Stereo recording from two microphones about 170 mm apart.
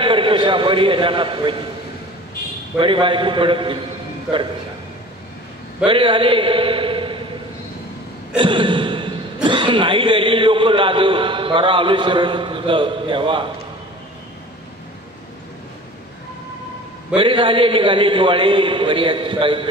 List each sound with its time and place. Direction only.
0.0 s a man's voice: 30° right (ahead or behind)
2.8 s a man's voice: 30° right (ahead or behind)
5.9 s a man's voice: 30° right (ahead or behind)
8.4 s speech: 30° right (ahead or behind)
17.2 s a man's voice: 30° right (ahead or behind)